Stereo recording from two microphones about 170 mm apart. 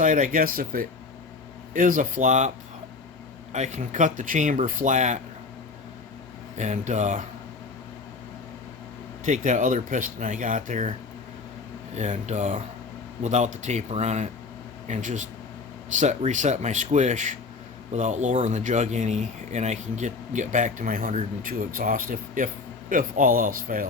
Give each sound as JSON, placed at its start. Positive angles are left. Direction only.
{"t": 0.0, "sound": "speech", "side_deg": -50}
{"t": 3.5, "sound": "speech", "side_deg": -45}
{"t": 6.6, "sound": "speech", "side_deg": -45}
{"t": 9.2, "sound": "speech", "side_deg": -45}
{"t": 11.9, "sound": "speech", "side_deg": -45}